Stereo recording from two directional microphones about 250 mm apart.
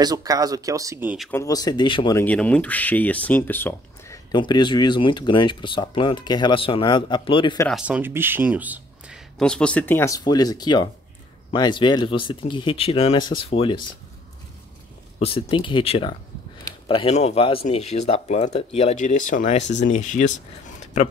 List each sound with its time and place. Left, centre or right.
0.0 s speech: centre
1.1 s speech: centre
1.4 s speech: centre
7.6 s speech: centre; by 13.7 s left
15.1 s speech: left